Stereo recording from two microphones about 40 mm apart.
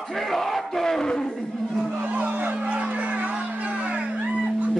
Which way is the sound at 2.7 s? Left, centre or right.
Right.